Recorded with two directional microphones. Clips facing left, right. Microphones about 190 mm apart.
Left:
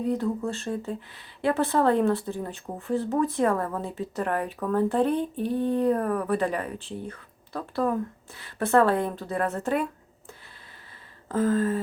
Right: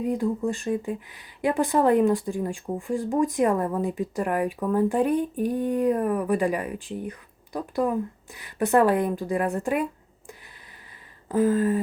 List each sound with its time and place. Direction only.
0.0 s speech: 15° right (ahead or behind)